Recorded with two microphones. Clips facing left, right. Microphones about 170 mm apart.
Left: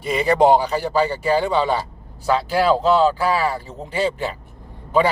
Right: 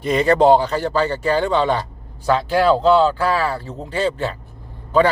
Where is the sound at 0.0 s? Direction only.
10° left (ahead or behind).